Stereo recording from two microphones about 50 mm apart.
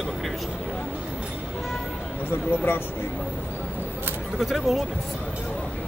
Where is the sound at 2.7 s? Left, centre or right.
Left.